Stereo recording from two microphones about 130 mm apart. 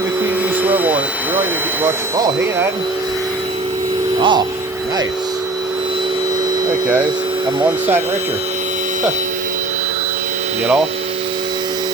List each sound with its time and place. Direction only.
0.6 s vacuum cleaner: 15° right (ahead or behind)
4.2 s speech: 35° right (ahead or behind)